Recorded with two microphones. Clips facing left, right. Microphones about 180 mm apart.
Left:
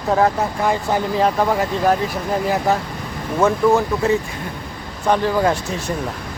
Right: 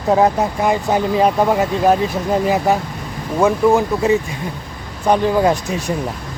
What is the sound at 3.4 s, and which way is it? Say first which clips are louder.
Speech: right 2 dB; 15° right (ahead or behind).